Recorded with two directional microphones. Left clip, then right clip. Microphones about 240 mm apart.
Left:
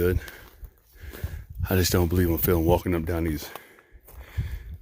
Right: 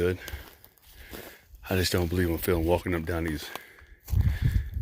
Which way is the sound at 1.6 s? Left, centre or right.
Left.